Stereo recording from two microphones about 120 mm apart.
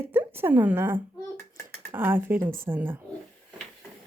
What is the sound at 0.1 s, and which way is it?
A woman's voice, 20° right (ahead or behind).